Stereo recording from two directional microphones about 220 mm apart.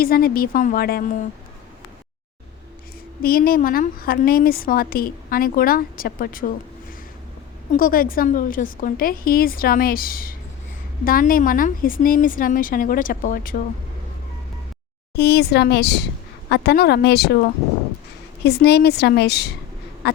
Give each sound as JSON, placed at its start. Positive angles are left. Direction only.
{"t": 0.0, "sound": "a woman's voice", "side_deg": 40}
{"t": 3.2, "sound": "a woman's voice", "side_deg": 40}
{"t": 7.7, "sound": "a woman's voice", "side_deg": 40}
{"t": 15.1, "sound": "a woman's voice", "side_deg": 50}
{"t": 20.0, "sound": "duck", "side_deg": 45}